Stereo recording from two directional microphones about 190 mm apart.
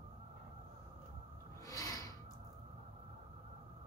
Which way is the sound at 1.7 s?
20° left (ahead or behind).